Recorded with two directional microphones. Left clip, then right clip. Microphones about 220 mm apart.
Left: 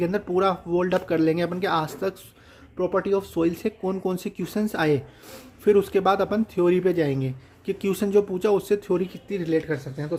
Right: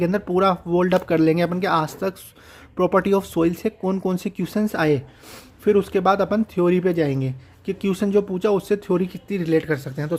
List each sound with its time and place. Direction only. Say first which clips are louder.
0.0 s speech: right 3 dB; 20° right (ahead or behind)
2.7 s speech: right 5 dB; 35° right (ahead or behind)